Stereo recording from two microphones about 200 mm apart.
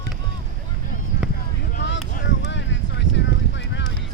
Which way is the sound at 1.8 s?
65° left (ahead or behind).